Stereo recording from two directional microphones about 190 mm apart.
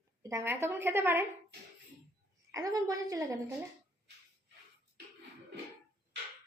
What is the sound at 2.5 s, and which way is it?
Speech, 20° right (ahead or behind).